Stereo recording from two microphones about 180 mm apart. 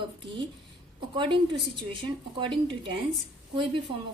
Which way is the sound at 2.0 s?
25° right (ahead or behind).